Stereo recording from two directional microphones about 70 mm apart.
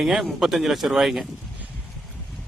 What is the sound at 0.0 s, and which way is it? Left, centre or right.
Speech, centre.